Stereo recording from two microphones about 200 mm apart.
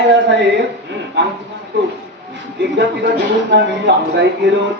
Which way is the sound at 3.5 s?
60° right (ahead or behind).